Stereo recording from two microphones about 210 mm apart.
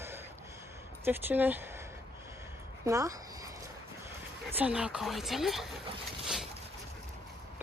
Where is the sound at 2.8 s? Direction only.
15° right (ahead or behind).